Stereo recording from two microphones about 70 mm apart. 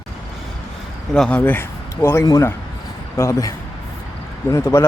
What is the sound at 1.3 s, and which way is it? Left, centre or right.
Speech, left.